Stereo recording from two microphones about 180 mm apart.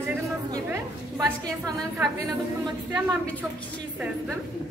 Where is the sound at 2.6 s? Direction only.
25° right (ahead or behind).